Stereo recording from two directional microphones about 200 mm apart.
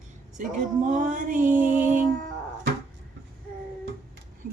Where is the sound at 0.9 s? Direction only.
40° right (ahead or behind).